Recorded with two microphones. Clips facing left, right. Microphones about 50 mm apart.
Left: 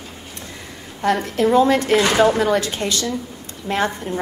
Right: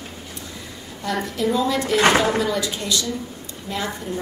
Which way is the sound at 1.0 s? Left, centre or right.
Left.